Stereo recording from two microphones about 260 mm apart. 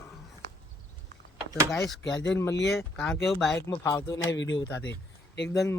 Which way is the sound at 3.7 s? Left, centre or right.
Centre.